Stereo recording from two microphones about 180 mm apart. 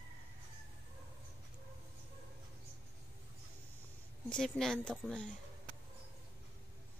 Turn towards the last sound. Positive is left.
turn(degrees=0)  # may be behind; listen again after turning